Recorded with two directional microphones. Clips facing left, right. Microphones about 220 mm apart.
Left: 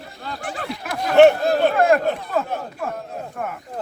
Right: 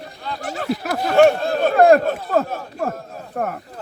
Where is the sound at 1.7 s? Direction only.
40° right (ahead or behind).